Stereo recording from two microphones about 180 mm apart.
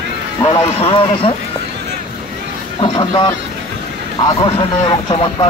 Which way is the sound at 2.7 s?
25° left (ahead or behind).